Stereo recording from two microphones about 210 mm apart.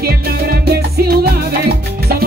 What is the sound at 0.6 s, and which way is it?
Music, 50° right (ahead or behind).